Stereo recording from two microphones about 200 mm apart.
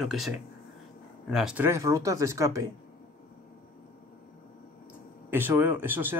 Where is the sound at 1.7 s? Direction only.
15° right (ahead or behind).